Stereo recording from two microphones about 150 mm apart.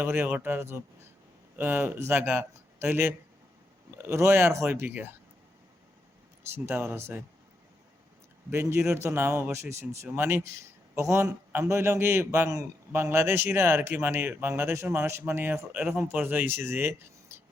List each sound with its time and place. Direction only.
0.0 s speech: 15° right (ahead or behind)
6.5 s speech: 15° right (ahead or behind)
8.4 s speech: 15° right (ahead or behind)